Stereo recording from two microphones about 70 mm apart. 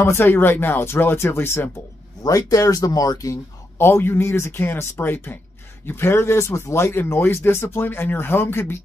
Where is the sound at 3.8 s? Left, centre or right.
Left.